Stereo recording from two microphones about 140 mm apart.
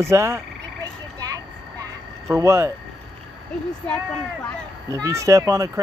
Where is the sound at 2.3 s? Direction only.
20° right (ahead or behind).